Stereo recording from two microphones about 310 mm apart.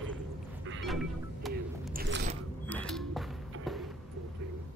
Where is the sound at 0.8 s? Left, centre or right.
Centre.